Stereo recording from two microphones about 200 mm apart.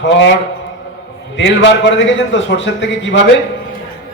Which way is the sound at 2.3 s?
65° left (ahead or behind).